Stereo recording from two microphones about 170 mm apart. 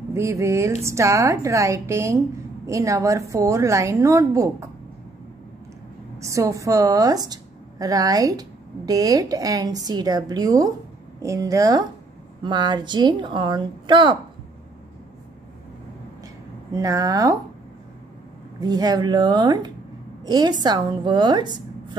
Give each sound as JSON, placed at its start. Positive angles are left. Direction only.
{"t": 0.1, "sound": "a woman's voice", "side_deg": -15}
{"t": 6.1, "sound": "a woman's voice", "side_deg": -15}
{"t": 16.7, "sound": "a woman's voice", "side_deg": -20}
{"t": 18.6, "sound": "a woman's voice", "side_deg": -25}